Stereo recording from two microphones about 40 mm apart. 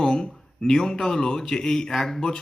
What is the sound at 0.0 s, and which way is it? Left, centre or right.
Speech, centre.